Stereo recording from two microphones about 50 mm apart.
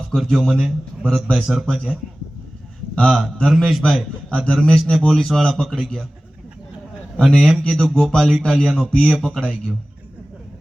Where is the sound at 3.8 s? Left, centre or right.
Left.